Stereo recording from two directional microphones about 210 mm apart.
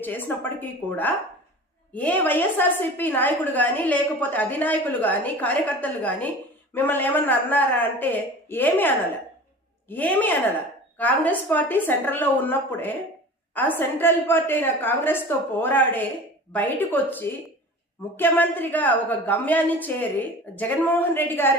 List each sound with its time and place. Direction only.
0.0 s a woman's voice: 10° left (ahead or behind)